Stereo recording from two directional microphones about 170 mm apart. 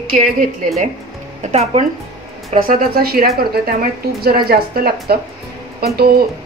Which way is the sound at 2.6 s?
60° right (ahead or behind).